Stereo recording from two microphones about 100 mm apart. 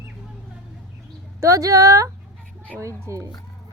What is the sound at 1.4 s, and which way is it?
A child's voice, 35° right (ahead or behind).